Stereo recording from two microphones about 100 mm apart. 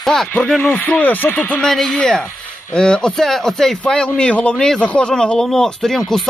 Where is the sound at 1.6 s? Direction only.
5° left (ahead or behind).